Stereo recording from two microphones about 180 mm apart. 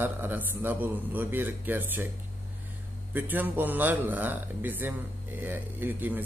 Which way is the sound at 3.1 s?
10° right (ahead or behind).